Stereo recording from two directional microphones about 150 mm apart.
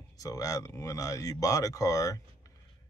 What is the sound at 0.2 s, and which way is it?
Speech, 25° left (ahead or behind).